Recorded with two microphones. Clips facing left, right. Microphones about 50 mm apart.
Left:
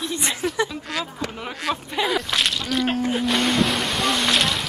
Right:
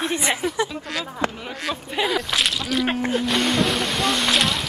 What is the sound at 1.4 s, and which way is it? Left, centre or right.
Speech, centre.